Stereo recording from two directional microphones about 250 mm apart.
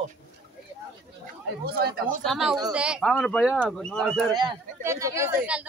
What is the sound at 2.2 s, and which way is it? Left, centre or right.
Speech, centre.